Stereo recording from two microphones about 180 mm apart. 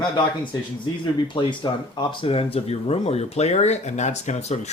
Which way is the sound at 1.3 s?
25° left (ahead or behind).